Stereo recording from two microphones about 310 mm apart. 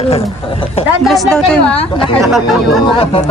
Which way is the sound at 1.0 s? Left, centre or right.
Centre.